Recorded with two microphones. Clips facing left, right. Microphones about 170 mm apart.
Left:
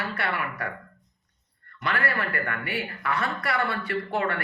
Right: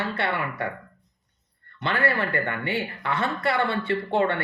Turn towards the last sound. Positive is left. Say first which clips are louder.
# right 4 dB
turn(degrees=-25)  # may be behind; listen again after turning